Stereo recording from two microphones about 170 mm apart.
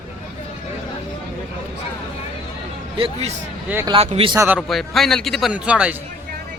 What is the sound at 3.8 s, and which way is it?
Speech, 30° right (ahead or behind).